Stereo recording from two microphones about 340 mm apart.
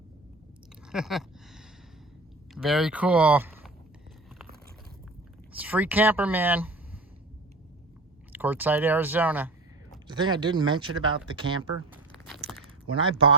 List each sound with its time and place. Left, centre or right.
0.9 s speech: centre
5.5 s speech: centre
8.3 s speech: centre
12.1 s walk: centre